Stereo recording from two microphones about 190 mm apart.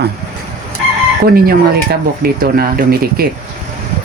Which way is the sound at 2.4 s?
50° right (ahead or behind).